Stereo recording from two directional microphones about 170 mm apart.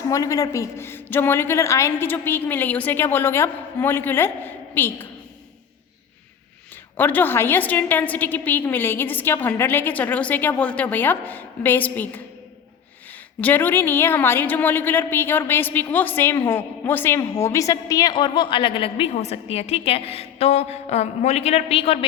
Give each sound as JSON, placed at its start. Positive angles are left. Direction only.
{"t": 0.1, "sound": "a woman's voice", "side_deg": 20}
{"t": 6.9, "sound": "a woman's voice", "side_deg": 10}
{"t": 13.4, "sound": "a woman's voice", "side_deg": 10}